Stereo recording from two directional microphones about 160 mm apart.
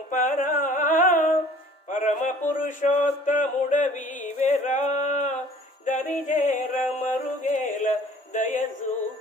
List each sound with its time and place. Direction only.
0.1 s music: 60° left (ahead or behind)
1.9 s a sound: 55° left (ahead or behind)
5.8 s music: 55° left (ahead or behind)